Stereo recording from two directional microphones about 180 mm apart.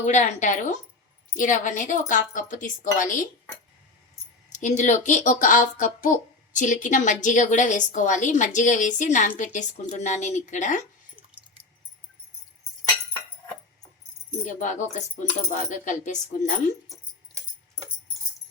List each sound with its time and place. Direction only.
0.0 s a woman's voice: 40° left (ahead or behind)
4.4 s speech: 40° left (ahead or behind)
14.3 s speech: 45° left (ahead or behind)